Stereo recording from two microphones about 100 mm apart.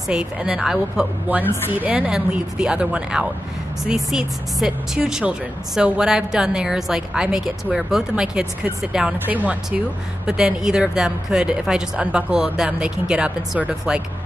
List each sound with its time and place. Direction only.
0.1 s speech: 10° right (ahead or behind)